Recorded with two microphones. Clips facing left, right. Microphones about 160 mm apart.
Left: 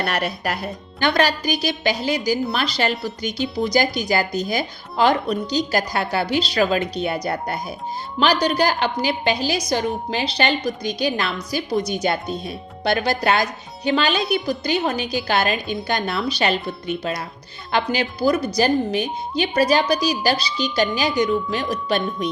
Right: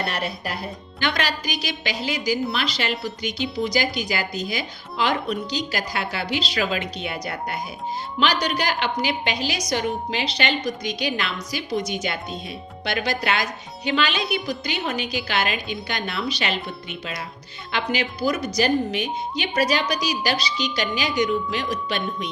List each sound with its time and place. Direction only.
0.0 s speech: 70° left (ahead or behind)
0.9 s a woman's voice: 35° left (ahead or behind)